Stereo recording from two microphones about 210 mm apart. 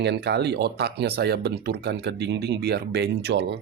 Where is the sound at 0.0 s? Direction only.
55° right (ahead or behind).